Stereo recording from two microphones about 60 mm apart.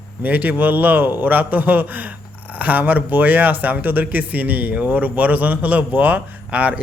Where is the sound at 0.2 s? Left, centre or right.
Right.